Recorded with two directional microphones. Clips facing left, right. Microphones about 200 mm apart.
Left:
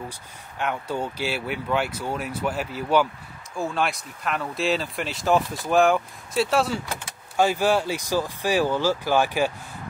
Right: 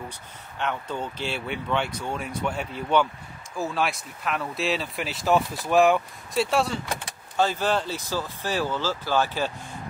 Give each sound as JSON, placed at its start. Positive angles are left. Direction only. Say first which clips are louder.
{"t": 0.6, "sound": "speech", "louder": "left 2 dB", "side_deg": 10}
{"t": 7.3, "sound": "speech", "louder": "left 3 dB", "side_deg": 10}